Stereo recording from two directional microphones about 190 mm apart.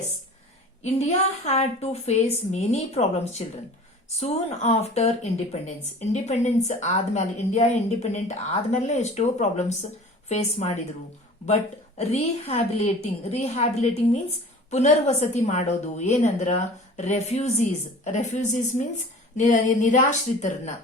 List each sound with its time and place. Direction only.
0.8 s a woman's voice: 35° left (ahead or behind)
14.7 s a woman's voice: 40° left (ahead or behind)